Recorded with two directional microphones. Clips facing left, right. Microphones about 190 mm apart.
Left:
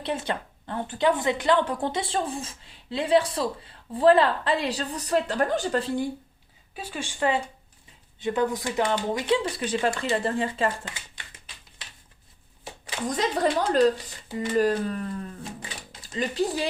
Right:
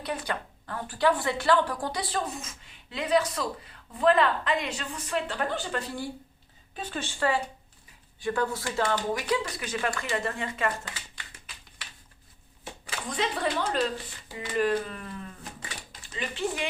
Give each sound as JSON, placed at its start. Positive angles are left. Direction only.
{"t": 0.0, "sound": "a woman's voice", "side_deg": 25}
{"t": 5.8, "sound": "a woman's voice", "side_deg": 25}
{"t": 6.7, "sound": "a woman's voice", "side_deg": 10}
{"t": 13.1, "sound": "speech", "side_deg": 40}